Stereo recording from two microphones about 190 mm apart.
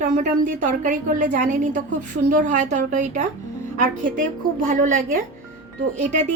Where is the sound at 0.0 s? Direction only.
40° right (ahead or behind).